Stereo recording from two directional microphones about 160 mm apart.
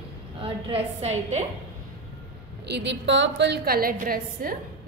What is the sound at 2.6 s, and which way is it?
A woman's voice, 90° right.